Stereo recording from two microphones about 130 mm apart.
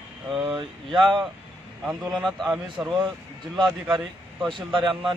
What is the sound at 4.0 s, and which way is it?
Speech, centre (ahead or behind).